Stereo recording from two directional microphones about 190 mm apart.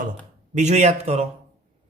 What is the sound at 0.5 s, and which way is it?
Speech, 40° right (ahead or behind).